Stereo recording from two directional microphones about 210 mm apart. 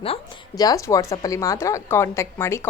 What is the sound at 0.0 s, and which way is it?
Speech, 20° left (ahead or behind).